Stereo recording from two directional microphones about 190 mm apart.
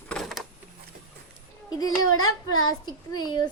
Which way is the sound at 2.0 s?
90° left.